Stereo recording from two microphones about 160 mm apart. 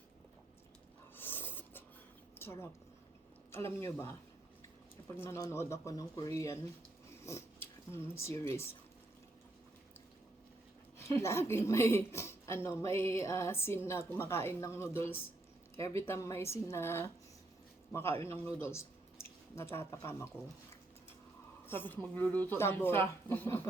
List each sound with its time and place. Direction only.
1.1 s a sound: 15° left (ahead or behind)
2.4 s a woman's voice: 15° left (ahead or behind)
10.9 s a woman's voice: 15° left (ahead or behind)
21.7 s a woman's voice: 10° left (ahead or behind)